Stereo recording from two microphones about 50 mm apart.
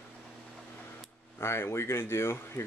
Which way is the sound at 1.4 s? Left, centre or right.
Left.